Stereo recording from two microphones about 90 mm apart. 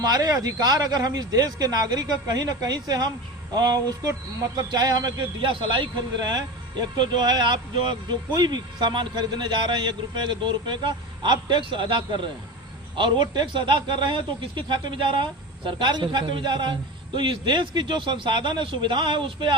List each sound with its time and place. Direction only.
0.0 s speech: 45° right (ahead or behind)
5.4 s a man's voice: 70° right (ahead or behind)
8.4 s a man's voice: 50° right (ahead or behind)